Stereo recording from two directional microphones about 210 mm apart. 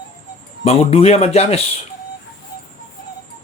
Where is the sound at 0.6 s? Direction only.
30° left (ahead or behind).